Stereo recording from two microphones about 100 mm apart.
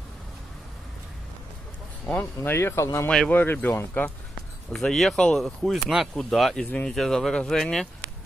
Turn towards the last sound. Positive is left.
turn(degrees=5)  # may be behind; listen again after turning